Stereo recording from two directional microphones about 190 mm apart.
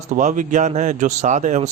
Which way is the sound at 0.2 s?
40° right (ahead or behind).